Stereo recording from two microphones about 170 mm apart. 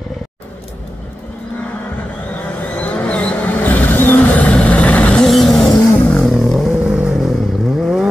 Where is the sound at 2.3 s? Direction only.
10° left (ahead or behind).